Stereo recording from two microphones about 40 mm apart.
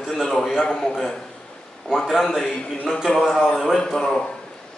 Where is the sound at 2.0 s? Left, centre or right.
Centre.